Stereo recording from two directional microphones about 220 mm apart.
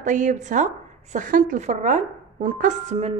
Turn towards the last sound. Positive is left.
turn(degrees=-30)  # may be behind; listen again after turning